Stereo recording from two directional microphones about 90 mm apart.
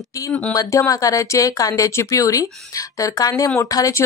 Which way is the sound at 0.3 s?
40° left (ahead or behind).